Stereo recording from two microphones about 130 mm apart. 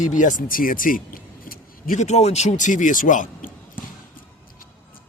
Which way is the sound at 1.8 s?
65° left (ahead or behind).